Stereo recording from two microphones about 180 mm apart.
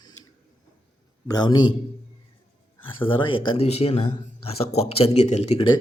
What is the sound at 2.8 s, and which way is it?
Speech, 30° left (ahead or behind).